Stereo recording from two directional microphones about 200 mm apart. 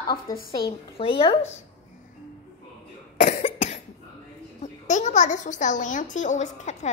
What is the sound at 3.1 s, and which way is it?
Cough, 35° left (ahead or behind).